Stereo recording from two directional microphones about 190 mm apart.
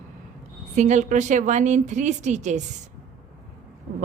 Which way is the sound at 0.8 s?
40° right (ahead or behind).